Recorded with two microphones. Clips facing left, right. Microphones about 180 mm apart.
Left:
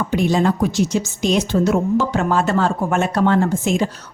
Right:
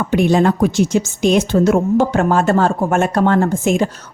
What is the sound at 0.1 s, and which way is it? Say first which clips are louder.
A woman's voice: right 5 dB; 60° right (ahead or behind).